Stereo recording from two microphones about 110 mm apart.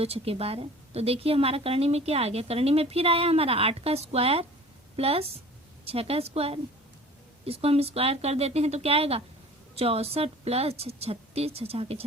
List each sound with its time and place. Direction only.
0.0 s a woman's voice: 65° right (ahead or behind)